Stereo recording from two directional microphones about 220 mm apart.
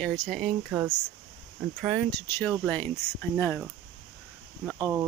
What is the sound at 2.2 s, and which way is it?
Speech, 10° left (ahead or behind).